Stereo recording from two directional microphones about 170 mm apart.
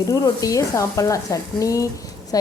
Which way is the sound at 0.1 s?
20° left (ahead or behind).